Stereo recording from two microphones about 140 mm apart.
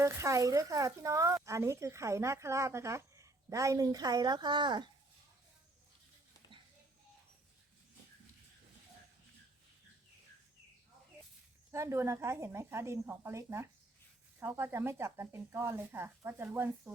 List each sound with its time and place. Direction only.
0.0 s speech: 20° right (ahead or behind)
6.5 s a sound: 35° right (ahead or behind)
11.7 s speech: 20° right (ahead or behind)